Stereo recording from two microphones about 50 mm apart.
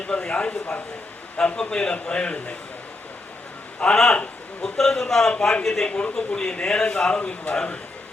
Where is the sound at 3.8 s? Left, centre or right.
Centre.